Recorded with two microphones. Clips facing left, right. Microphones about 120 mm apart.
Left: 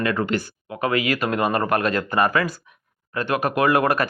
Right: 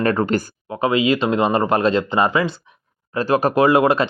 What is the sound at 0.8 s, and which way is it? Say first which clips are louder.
Speech: right 5 dB; 25° right (ahead or behind).